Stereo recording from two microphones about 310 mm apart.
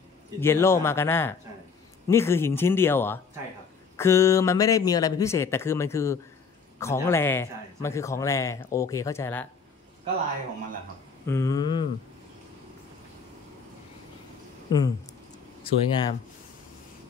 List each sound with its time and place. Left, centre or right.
0.4 s speech: centre
11.2 s speech: centre
14.7 s speech: centre